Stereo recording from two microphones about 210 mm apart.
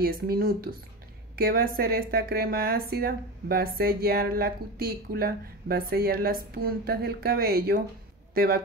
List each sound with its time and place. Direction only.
0.0 s speech: 45° right (ahead or behind)